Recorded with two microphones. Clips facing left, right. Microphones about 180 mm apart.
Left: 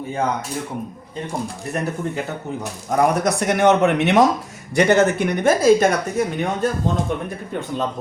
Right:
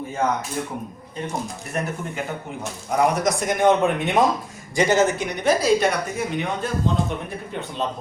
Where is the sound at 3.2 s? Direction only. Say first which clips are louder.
Left 2 dB; 70° left (ahead or behind).